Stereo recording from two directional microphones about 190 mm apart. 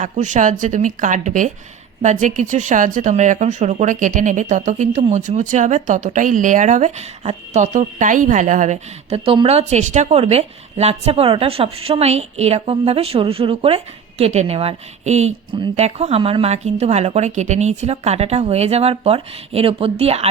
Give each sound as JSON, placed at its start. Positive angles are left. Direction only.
{"t": 0.0, "sound": "speech", "side_deg": -40}